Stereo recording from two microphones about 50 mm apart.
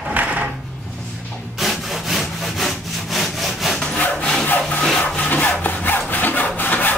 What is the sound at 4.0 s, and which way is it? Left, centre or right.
Sawing, left.